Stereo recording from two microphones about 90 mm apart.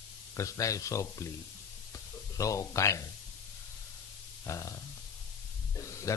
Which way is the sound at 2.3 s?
35° left (ahead or behind).